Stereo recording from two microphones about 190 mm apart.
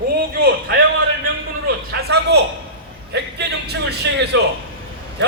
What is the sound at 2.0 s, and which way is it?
Speech, 60° right (ahead or behind).